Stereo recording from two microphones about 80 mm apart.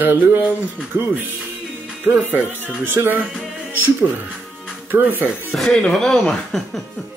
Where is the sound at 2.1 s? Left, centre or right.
Centre.